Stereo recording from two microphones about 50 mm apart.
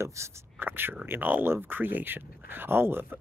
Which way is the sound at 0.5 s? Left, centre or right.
Right.